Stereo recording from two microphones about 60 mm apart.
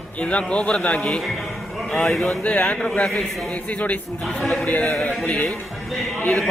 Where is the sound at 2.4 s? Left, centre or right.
Centre.